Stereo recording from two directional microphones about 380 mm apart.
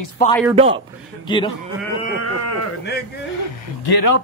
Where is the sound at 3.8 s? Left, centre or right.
Left.